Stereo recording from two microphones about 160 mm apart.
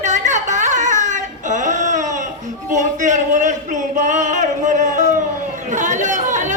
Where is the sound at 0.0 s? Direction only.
50° right (ahead or behind).